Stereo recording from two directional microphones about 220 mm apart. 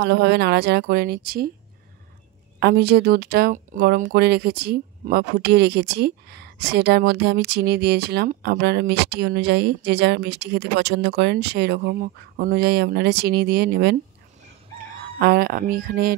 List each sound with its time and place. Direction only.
0.0 s speech: 50° right (ahead or behind)
2.6 s speech: 45° right (ahead or behind)
15.1 s speech: 45° right (ahead or behind)